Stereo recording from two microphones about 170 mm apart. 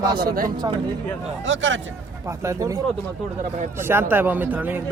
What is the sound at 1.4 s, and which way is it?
Speech, 90° right.